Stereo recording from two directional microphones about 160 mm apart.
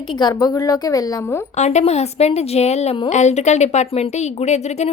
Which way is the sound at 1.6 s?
45° left (ahead or behind).